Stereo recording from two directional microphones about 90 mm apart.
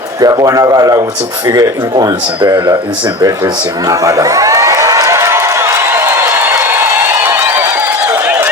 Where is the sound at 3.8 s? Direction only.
40° right (ahead or behind).